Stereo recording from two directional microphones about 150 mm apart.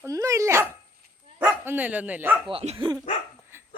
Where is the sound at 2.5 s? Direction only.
40° right (ahead or behind).